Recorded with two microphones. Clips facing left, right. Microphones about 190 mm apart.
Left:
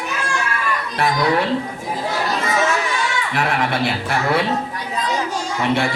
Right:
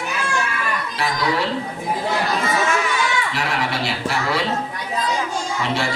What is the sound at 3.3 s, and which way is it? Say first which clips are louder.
A man's voice: left 4 dB; 55° left (ahead or behind).